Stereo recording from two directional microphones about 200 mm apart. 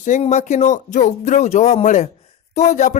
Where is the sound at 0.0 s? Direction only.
35° left (ahead or behind).